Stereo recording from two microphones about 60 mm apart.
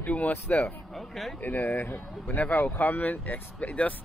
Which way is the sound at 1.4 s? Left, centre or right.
Left.